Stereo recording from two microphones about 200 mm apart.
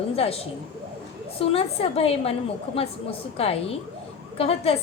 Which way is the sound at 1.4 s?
30° left (ahead or behind).